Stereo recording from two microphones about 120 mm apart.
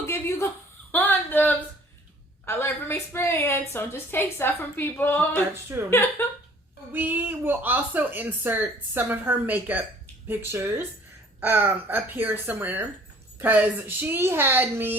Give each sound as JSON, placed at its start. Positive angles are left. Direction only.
{"t": 0.0, "sound": "chuckle", "side_deg": 25}
{"t": 0.9, "sound": "a sound", "side_deg": 15}
{"t": 2.5, "sound": "a woman's voice", "side_deg": 20}
{"t": 6.9, "sound": "speech", "side_deg": -15}